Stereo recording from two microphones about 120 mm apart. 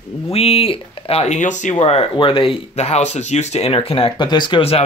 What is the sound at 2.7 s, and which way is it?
Speech, 65° left (ahead or behind).